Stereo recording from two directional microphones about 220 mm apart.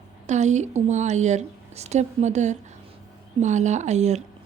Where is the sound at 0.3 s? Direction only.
30° right (ahead or behind).